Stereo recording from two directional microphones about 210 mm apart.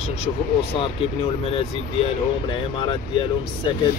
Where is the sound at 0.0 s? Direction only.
30° left (ahead or behind).